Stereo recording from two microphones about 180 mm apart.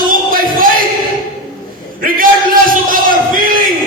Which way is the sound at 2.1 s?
50° right (ahead or behind).